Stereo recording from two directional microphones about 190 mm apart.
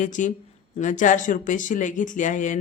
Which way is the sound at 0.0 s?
40° left (ahead or behind).